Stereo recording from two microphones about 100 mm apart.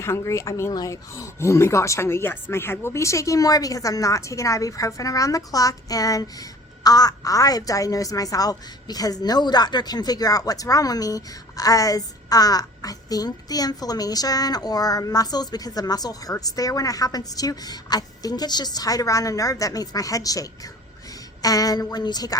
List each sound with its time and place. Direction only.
0.0 s speech: 30° left (ahead or behind)